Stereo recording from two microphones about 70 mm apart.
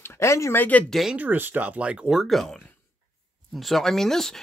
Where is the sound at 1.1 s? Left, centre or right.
Right.